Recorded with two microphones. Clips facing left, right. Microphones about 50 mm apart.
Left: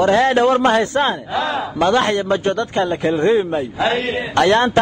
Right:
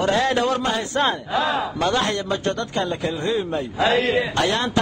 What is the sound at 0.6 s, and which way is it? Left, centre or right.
Speech, left.